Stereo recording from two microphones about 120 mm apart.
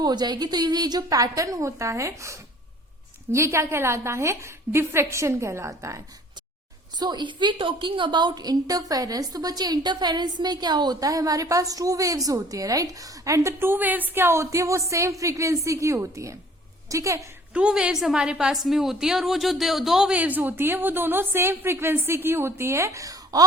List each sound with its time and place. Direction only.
0.0 s a woman's voice: 35° right (ahead or behind)
7.0 s a woman's voice: 40° right (ahead or behind)
17.5 s a woman's voice: 10° right (ahead or behind); by 23.4 s 30° right (ahead or behind)